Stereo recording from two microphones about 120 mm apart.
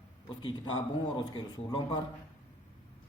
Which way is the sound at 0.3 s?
40° left (ahead or behind).